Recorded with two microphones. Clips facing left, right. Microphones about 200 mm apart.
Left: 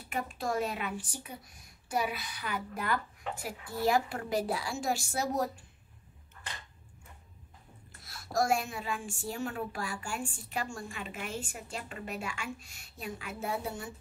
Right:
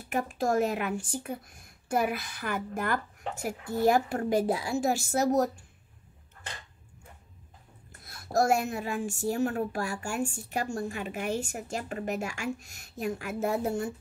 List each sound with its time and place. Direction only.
0.1 s a woman's voice: 45° right (ahead or behind)
8.0 s a woman's voice: 55° right (ahead or behind)